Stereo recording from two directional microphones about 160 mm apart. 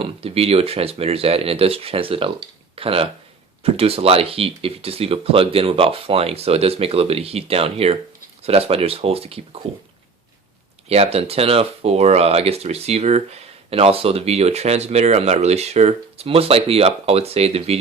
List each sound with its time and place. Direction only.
0.0 s speech: 35° right (ahead or behind)
10.8 s speech: 40° right (ahead or behind)